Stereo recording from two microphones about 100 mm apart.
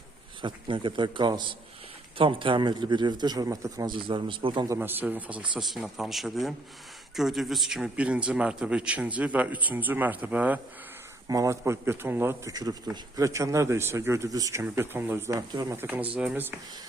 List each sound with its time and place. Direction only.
0.4 s a man's voice: 55° right (ahead or behind); by 3.9 s 35° right (ahead or behind)
3.9 s a man's voice: 55° right (ahead or behind)
4.8 s speech: 20° right (ahead or behind)
5.5 s a man's voice: centre (ahead or behind)
11.3 s speech: 35° right (ahead or behind)
12.5 s speech: 40° right (ahead or behind)
14.6 s speech: 20° right (ahead or behind)
15.4 s speech: 35° right (ahead or behind)
15.8 s a man's voice: 15° right (ahead or behind)